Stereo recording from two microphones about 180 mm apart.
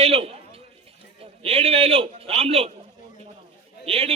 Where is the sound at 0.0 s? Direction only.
30° right (ahead or behind).